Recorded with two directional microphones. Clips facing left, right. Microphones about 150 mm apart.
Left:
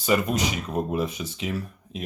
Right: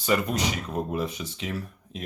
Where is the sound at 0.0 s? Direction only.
15° left (ahead or behind).